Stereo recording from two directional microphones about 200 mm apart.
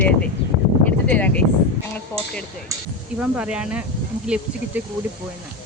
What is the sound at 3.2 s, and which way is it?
Speech, 5° right (ahead or behind).